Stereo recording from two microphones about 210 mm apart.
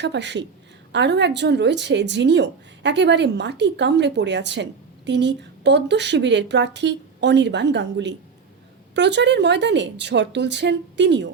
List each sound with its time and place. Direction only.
0.0 s speech: 55° right (ahead or behind)